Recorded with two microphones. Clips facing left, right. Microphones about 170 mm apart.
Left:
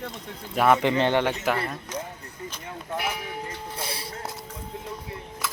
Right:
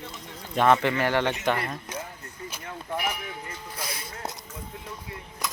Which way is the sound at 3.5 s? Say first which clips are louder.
Left 3 dB; 30° left (ahead or behind).